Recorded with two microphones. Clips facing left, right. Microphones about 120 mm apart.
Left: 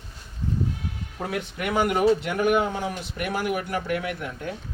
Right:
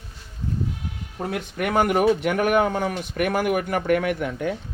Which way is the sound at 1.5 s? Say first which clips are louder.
Right 3 dB; 50° right (ahead or behind).